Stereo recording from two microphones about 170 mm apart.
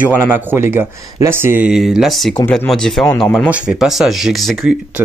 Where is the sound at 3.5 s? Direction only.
5° right (ahead or behind).